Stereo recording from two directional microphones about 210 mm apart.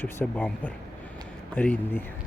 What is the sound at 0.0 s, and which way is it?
Speech, 10° left (ahead or behind).